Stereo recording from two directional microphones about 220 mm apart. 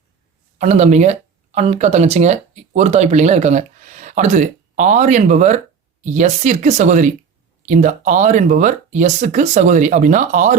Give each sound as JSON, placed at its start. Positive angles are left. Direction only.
{"t": 0.6, "sound": "speech", "side_deg": -30}